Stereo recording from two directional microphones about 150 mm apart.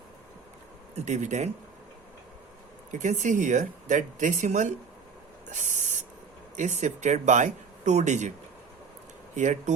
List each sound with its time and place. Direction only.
0.9 s speech: 50° right (ahead or behind)
2.9 s speech: 55° right (ahead or behind)
5.5 s owl: 55° right (ahead or behind)
6.6 s speech: 50° right (ahead or behind)
9.3 s speech: 55° right (ahead or behind)